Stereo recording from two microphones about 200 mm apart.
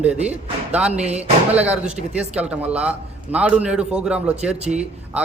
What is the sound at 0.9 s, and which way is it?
Speech, 35° right (ahead or behind).